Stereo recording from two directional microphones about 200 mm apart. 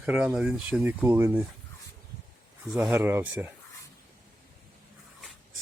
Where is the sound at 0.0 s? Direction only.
10° right (ahead or behind).